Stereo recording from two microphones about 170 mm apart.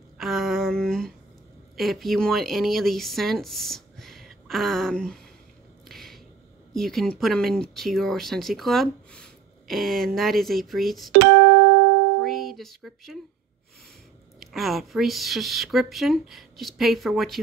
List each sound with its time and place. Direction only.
0.2 s a sound: centre (ahead or behind)
1.8 s speech: centre (ahead or behind)
5.9 s a sound: centre (ahead or behind)
6.7 s speech: centre (ahead or behind)
11.1 s music: 80° right
12.2 s music: centre (ahead or behind)
14.4 s speech: centre (ahead or behind)